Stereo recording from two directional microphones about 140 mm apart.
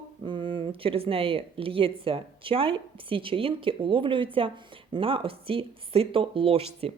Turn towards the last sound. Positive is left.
turn(degrees=-45)  # may be behind; listen again after turning